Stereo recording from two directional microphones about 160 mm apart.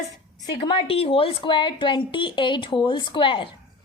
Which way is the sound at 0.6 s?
35° left (ahead or behind).